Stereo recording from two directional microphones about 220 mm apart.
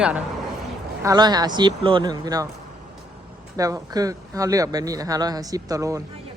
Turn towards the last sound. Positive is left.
turn(degrees=-15)  # may be behind; listen again after turning